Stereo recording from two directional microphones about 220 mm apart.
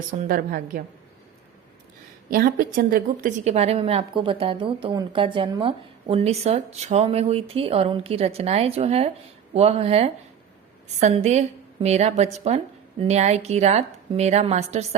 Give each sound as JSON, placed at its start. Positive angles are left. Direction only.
{"t": 0.2, "sound": "a woman's voice", "side_deg": -40}
{"t": 2.3, "sound": "a woman's voice", "side_deg": -40}